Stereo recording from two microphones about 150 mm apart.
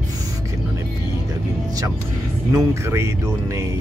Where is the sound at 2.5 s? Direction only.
20° right (ahead or behind).